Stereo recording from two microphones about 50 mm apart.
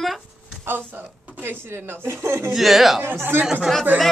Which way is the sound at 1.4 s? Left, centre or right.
Right.